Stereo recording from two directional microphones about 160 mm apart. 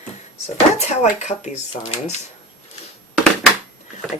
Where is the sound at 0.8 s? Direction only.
45° left (ahead or behind).